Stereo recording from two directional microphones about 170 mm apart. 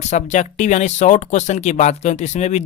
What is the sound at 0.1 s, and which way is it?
Speech, 45° left (ahead or behind).